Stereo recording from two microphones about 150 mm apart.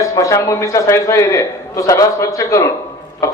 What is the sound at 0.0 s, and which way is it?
A man's voice, 20° left (ahead or behind).